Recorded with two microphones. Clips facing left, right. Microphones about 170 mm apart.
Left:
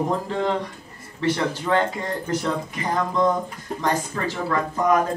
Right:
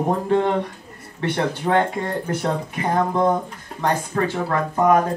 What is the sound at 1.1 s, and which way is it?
Speech, 60° right (ahead or behind).